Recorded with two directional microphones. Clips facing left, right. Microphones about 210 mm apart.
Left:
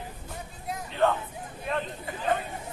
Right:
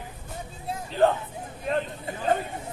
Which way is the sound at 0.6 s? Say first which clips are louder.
Right 3 dB; 30° right (ahead or behind).